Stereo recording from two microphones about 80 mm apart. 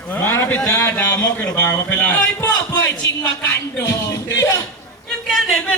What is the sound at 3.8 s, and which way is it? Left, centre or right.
Speech, left.